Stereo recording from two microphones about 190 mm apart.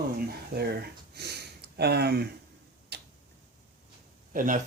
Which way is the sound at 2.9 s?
60° right (ahead or behind).